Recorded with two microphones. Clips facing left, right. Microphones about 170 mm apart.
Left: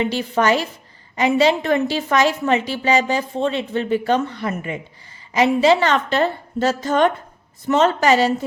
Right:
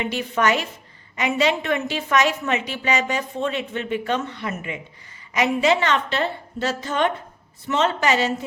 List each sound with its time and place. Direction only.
0.0 s a woman's voice: 30° left (ahead or behind)